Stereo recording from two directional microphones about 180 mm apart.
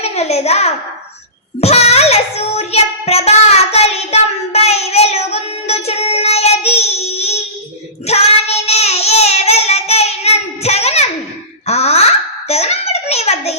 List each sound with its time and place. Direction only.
0.0 s a child's voice: 35° left (ahead or behind)
1.6 s child singing: 35° left (ahead or behind)
11.6 s a sound: 35° left (ahead or behind)